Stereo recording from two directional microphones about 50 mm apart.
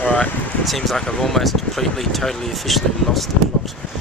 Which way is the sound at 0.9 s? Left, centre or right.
Centre.